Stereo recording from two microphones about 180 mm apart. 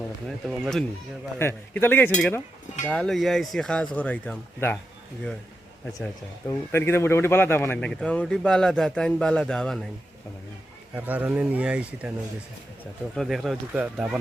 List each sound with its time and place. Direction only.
0.3 s speech: 5° right (ahead or behind)
1.4 s speech: 10° left (ahead or behind)
6.7 s speech: 15° left (ahead or behind)
10.9 s speech: 10° right (ahead or behind)
13.1 s speech: centre (ahead or behind)